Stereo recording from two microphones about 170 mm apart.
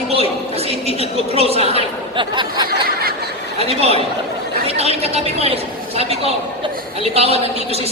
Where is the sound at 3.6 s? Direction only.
35° right (ahead or behind).